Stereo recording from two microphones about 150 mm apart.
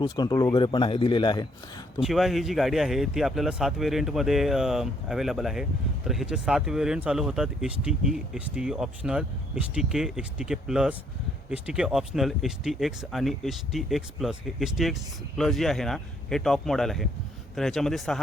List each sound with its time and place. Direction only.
0.0 s a man's voice: 25° left (ahead or behind)
2.0 s speech: 5° right (ahead or behind)